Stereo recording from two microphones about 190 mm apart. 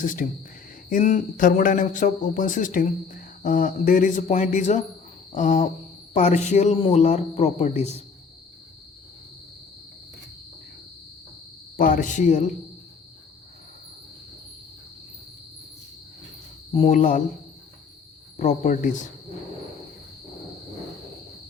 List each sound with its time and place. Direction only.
0.0 s speech: 45° left (ahead or behind)
11.8 s speech: 45° left (ahead or behind)
16.7 s speech: 35° left (ahead or behind)
18.3 s speech: 40° left (ahead or behind)